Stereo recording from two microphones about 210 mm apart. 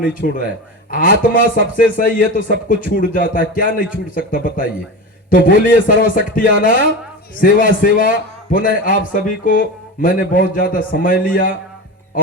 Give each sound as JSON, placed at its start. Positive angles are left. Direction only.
{"t": 0.0, "sound": "a man's voice", "side_deg": 40}